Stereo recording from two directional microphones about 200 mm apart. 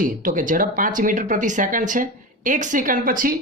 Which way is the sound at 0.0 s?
40° right (ahead or behind).